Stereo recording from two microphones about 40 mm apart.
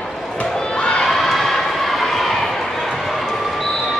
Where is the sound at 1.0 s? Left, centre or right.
Centre.